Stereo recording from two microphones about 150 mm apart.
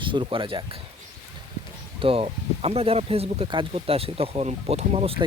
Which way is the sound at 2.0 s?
40° right (ahead or behind).